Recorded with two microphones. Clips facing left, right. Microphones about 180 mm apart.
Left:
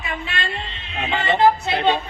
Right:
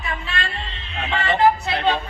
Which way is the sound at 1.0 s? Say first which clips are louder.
Left 1 dB; 20° left (ahead or behind).